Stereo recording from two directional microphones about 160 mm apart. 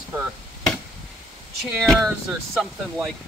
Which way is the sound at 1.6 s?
Centre (ahead or behind).